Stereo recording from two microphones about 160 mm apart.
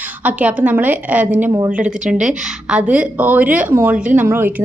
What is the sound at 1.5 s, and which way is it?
Speech, 20° right (ahead or behind).